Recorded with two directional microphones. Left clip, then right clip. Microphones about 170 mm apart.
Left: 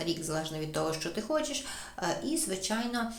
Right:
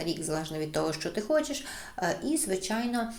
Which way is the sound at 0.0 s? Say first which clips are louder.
Right 1 dB; 20° right (ahead or behind).